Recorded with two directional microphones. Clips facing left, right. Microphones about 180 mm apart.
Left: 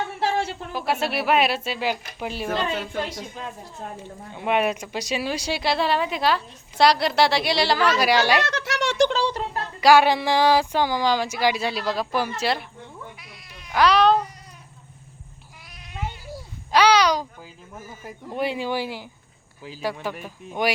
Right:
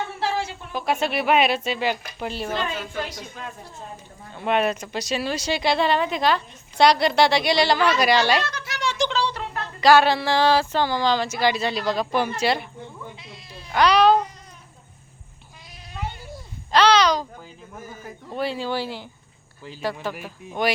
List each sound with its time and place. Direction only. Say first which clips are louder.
0.7 s speech: right 3 dB; 5° left (ahead or behind)
3.0 s a woman's voice: left 2 dB; 25° left (ahead or behind)
4.4 s speech: even; 10° left (ahead or behind)
8.4 s speech: left 3 dB; 75° left (ahead or behind)
9.0 s speech: left 2 dB; 50° left (ahead or behind)
9.8 s speech: even; 10° left (ahead or behind)
13.1 s bleat: right 3 dB; 25° right (ahead or behind)
13.7 s speech: right 1 dB; centre (ahead or behind)
16.7 s speech: even; 10° left (ahead or behind)
20.1 s speech: even; 5° right (ahead or behind)